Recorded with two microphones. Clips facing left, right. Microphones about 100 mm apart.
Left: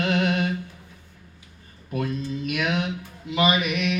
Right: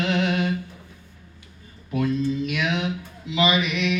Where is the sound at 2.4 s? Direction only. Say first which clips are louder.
Even; 45° left (ahead or behind).